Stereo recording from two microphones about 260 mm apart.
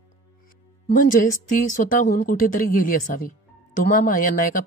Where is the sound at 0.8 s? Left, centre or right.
Left.